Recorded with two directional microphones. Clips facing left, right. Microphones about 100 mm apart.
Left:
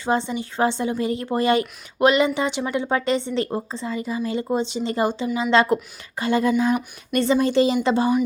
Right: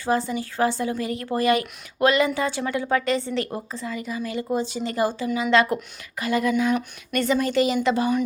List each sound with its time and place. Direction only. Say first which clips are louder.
0.0 s a woman's voice: left 1 dB; 25° left (ahead or behind)